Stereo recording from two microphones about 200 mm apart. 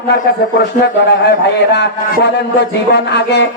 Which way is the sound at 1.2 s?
60° left (ahead or behind).